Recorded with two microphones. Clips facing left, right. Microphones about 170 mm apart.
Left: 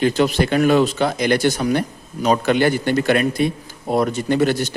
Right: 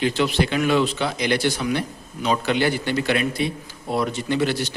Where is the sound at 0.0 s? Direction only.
45° left (ahead or behind).